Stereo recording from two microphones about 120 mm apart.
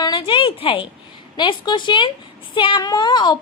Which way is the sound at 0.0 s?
40° left (ahead or behind).